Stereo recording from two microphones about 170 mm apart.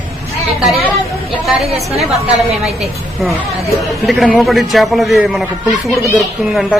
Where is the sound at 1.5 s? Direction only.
Centre (ahead or behind).